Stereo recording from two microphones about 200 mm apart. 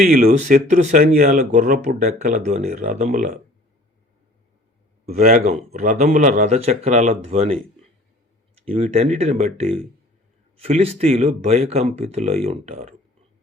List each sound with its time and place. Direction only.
0.0 s speech: 45° right (ahead or behind)
5.0 s speech: 40° right (ahead or behind)
8.7 s speech: 30° right (ahead or behind)